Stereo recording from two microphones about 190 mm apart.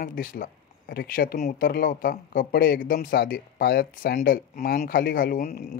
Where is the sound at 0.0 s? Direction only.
50° left (ahead or behind).